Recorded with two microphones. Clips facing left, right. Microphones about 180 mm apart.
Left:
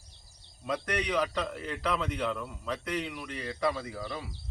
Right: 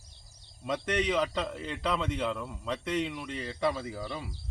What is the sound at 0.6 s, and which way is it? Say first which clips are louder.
A man's voice: right 2 dB; 25° right (ahead or behind).